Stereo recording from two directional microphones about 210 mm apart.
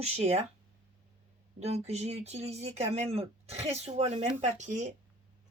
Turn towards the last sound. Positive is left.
turn(degrees=-35)  # may be behind; listen again after turning